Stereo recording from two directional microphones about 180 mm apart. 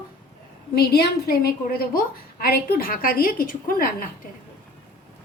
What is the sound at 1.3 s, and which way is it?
A woman's voice, 55° left (ahead or behind).